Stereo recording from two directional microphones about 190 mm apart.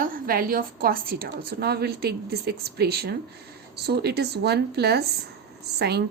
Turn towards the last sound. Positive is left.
turn(degrees=-60)  # may be behind; listen again after turning